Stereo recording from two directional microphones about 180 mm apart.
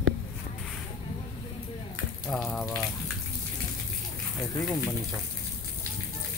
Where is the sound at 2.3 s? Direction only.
Centre (ahead or behind).